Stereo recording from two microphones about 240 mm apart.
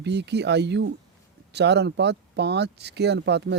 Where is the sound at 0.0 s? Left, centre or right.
Right.